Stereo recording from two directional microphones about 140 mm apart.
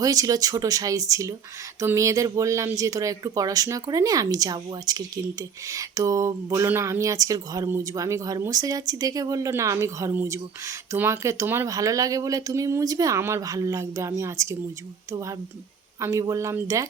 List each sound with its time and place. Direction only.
0.0 s speech: 25° right (ahead or behind)